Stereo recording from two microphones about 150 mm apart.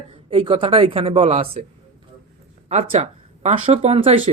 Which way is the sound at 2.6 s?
45° right (ahead or behind).